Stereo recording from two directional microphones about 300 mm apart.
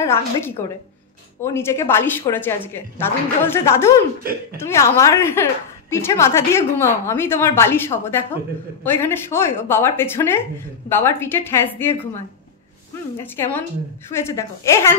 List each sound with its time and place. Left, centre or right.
0.0 s a woman's voice: centre
13.2 s a woman's voice: centre